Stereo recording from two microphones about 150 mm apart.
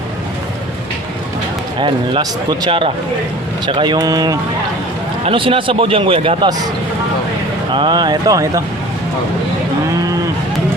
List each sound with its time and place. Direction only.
1.8 s a man's voice: 30° right (ahead or behind)
5.2 s a man's voice: 35° right (ahead or behind)
7.7 s speech: 30° right (ahead or behind)